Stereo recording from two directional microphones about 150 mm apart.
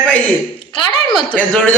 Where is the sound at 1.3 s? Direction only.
10° left (ahead or behind).